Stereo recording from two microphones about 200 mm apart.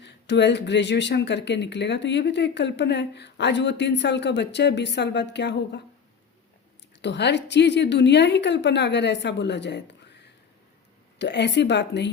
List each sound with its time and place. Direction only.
0.0 s speech: 60° left (ahead or behind)
7.0 s speech: 60° left (ahead or behind)